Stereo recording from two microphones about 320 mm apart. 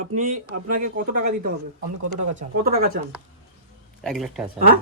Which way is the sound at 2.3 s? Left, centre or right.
Right.